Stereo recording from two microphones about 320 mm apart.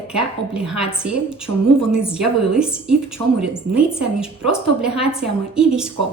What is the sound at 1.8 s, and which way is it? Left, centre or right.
A woman's voice, centre.